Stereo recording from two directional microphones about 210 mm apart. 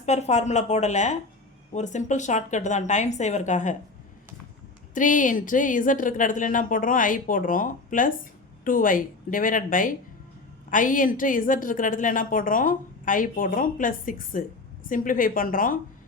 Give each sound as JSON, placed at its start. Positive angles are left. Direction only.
{"t": 0.0, "sound": "speech", "side_deg": 30}
{"t": 4.9, "sound": "speech", "side_deg": 40}